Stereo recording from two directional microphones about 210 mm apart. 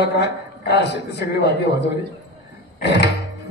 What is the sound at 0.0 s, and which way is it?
A man's voice, 50° left (ahead or behind).